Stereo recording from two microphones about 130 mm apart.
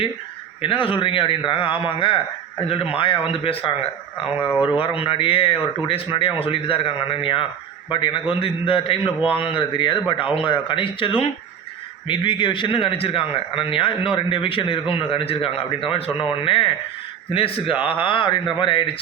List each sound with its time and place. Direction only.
0.6 s a man's voice: 45° left (ahead or behind)
4.8 s a man's voice: 40° left (ahead or behind)